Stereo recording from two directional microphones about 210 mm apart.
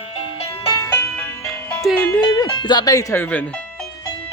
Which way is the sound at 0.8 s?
15° left (ahead or behind).